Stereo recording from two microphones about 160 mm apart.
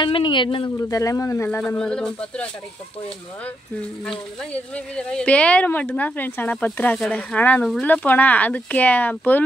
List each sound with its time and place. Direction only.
0.0 s speech: 30° left (ahead or behind)
1.8 s speech: 5° left (ahead or behind)
4.0 s speech: 5° left (ahead or behind)